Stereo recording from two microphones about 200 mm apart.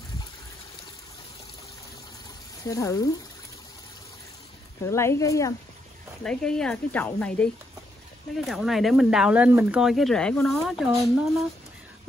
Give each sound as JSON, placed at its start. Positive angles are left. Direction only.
{"t": 2.7, "sound": "speech", "side_deg": 15}
{"t": 4.8, "sound": "speech", "side_deg": 15}
{"t": 6.2, "sound": "speech", "side_deg": 5}